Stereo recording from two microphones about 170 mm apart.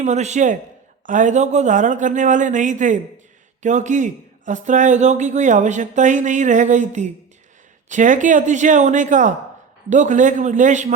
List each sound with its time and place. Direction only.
0.0 s speech: 45° right (ahead or behind)